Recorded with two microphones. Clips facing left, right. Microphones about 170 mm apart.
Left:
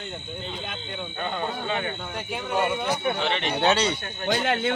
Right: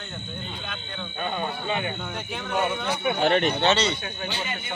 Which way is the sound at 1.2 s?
15° right (ahead or behind).